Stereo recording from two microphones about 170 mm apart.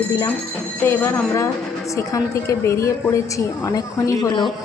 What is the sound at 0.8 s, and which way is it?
A woman's voice, 15° left (ahead or behind).